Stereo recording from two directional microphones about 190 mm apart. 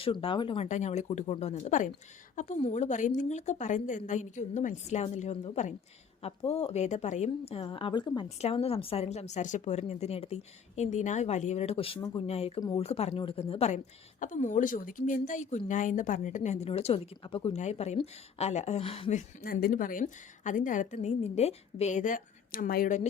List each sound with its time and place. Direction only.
0.0 s a woman's voice: 30° left (ahead or behind)
19.4 s a woman's voice: 50° left (ahead or behind)